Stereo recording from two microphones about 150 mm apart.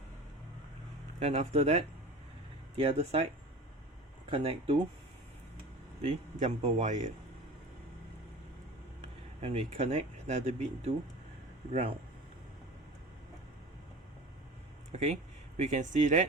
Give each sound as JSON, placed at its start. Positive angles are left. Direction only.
{"t": 1.2, "sound": "speech", "side_deg": -40}
{"t": 4.3, "sound": "speech", "side_deg": -35}
{"t": 6.0, "sound": "speech", "side_deg": -45}
{"t": 9.4, "sound": "speech", "side_deg": -40}
{"t": 14.9, "sound": "speech", "side_deg": -50}